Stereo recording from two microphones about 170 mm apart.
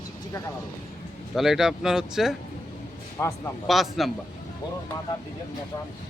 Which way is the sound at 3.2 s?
15° left (ahead or behind).